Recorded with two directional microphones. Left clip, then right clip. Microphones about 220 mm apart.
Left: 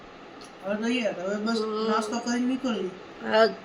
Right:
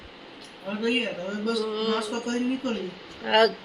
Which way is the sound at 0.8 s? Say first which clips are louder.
Right 5 dB; centre (ahead or behind).